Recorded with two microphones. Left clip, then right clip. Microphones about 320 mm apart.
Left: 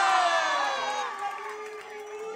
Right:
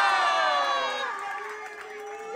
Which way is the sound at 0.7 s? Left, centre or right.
Right.